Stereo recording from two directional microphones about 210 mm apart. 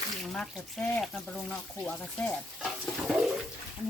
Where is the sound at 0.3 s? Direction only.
5° left (ahead or behind).